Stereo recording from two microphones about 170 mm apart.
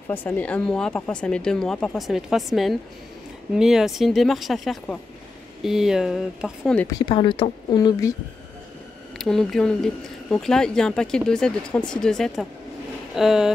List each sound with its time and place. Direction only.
0.1 s speech: 10° left (ahead or behind)
7.1 s speech: 30° left (ahead or behind)
9.2 s speech: centre (ahead or behind)